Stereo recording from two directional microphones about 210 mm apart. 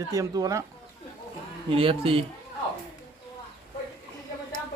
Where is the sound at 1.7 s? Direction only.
25° right (ahead or behind).